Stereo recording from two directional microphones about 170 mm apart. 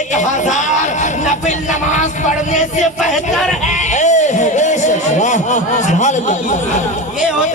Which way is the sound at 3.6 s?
45° left (ahead or behind).